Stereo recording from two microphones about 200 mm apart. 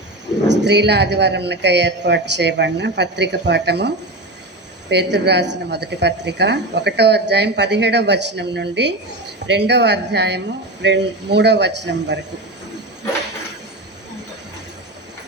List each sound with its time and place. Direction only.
0.4 s a woman's voice: 60° right (ahead or behind)